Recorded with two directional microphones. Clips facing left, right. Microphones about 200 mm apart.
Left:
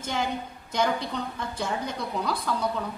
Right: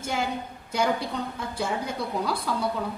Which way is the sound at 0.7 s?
10° right (ahead or behind).